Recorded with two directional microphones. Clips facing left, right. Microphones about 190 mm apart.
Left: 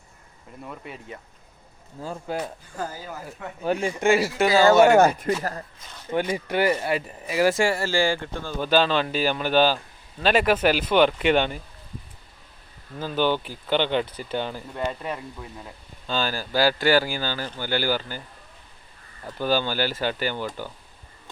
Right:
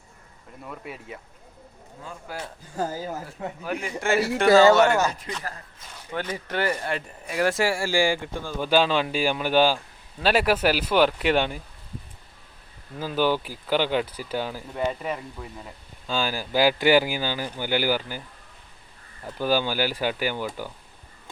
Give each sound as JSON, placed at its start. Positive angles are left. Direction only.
{"t": 0.6, "sound": "speech", "side_deg": 0}
{"t": 2.0, "sound": "speech", "side_deg": 35}
{"t": 2.7, "sound": "speech", "side_deg": -40}
{"t": 3.6, "sound": "a man's voice", "side_deg": 30}
{"t": 4.5, "sound": "speech", "side_deg": 10}
{"t": 4.9, "sound": "speech", "side_deg": 55}
{"t": 6.1, "sound": "speech", "side_deg": 10}
{"t": 13.0, "sound": "speech", "side_deg": -5}
{"t": 19.2, "sound": "speech", "side_deg": -10}